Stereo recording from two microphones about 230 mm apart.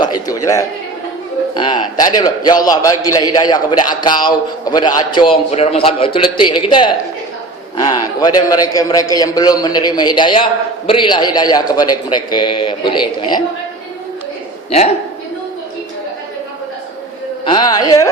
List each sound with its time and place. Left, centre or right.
0.0 s a sound: centre
1.5 s a man's voice: centre
17.4 s a man's voice: centre